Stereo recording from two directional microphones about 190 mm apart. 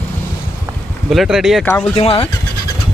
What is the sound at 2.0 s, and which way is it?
Speech, 30° left (ahead or behind).